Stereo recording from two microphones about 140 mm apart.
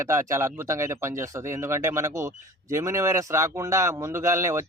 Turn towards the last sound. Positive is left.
turn(degrees=-20)  # may be behind; listen again after turning